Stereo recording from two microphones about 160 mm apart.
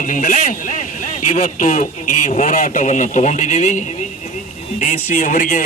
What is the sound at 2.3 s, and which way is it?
A man's voice, 45° left (ahead or behind).